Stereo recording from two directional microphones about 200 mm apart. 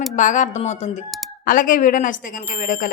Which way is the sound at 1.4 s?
40° left (ahead or behind).